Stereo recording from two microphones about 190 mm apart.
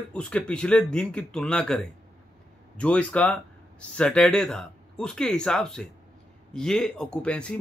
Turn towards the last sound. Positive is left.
turn(degrees=5)  # may be behind; listen again after turning